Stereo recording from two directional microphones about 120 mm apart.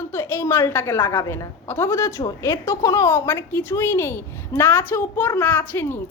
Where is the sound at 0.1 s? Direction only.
20° left (ahead or behind).